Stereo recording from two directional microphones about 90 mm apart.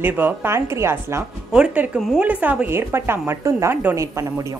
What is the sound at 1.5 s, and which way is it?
A woman's voice, 10° right (ahead or behind).